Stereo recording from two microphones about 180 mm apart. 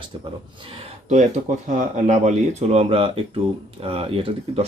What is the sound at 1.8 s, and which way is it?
Speech, 40° right (ahead or behind).